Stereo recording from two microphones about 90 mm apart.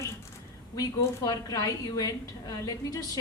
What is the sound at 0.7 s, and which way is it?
A woman's voice, 45° left (ahead or behind).